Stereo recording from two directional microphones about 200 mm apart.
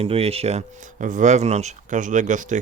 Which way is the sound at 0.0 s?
30° right (ahead or behind).